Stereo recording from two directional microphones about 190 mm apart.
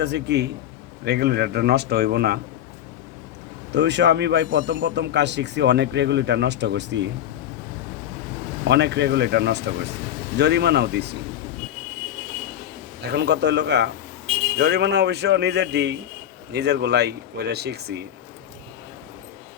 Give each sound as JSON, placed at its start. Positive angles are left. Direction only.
{"t": 0.0, "sound": "a man's voice", "side_deg": -65}
{"t": 3.7, "sound": "a man's voice", "side_deg": -65}
{"t": 8.6, "sound": "a man's voice", "side_deg": -65}
{"t": 13.0, "sound": "a man's voice", "side_deg": -60}